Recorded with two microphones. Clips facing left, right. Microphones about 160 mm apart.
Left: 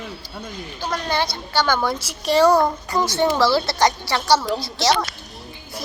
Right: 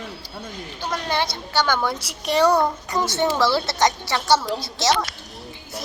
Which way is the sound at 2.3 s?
30° left (ahead or behind).